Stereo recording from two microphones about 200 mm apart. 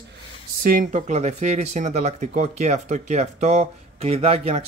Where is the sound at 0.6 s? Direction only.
45° right (ahead or behind).